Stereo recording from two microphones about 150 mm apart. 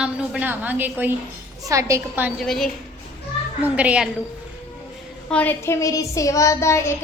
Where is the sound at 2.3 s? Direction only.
Centre (ahead or behind).